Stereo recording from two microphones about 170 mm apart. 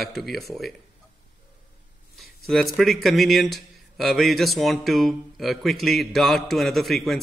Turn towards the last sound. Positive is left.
turn(degrees=0)  # may be behind; listen again after turning